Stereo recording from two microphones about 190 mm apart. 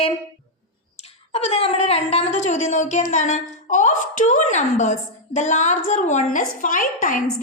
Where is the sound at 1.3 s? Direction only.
30° left (ahead or behind).